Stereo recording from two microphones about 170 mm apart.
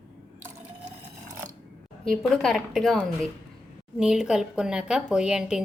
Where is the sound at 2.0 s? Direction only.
5° left (ahead or behind).